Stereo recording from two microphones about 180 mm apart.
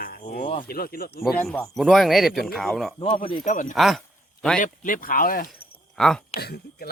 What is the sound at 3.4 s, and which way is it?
Speech, 45° left (ahead or behind).